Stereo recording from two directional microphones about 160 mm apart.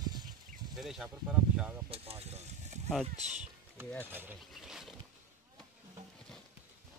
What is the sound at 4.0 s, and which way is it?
Speech, 15° right (ahead or behind).